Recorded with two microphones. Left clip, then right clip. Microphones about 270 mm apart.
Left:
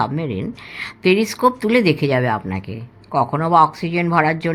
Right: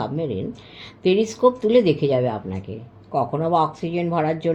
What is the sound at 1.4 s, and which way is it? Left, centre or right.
Speech, left.